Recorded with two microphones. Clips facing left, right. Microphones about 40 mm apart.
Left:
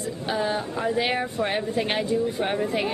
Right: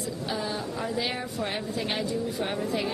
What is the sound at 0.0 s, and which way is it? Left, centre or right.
Speech, left.